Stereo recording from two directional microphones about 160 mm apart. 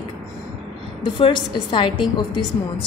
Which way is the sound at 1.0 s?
30° left (ahead or behind).